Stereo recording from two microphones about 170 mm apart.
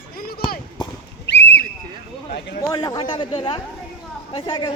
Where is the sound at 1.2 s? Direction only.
90° left.